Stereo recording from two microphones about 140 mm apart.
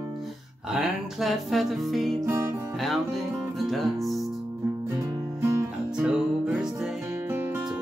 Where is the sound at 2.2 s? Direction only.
20° right (ahead or behind).